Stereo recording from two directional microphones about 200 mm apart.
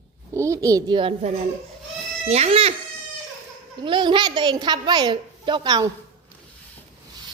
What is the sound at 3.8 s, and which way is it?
A woman's voice, 25° right (ahead or behind).